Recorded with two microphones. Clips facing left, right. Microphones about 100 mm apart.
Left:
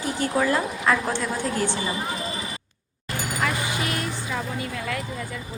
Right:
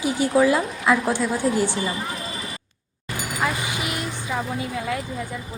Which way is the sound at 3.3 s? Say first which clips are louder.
Right 1 dB; 15° right (ahead or behind).